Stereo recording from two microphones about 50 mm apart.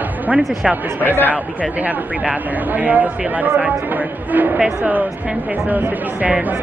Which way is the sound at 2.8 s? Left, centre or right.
Right.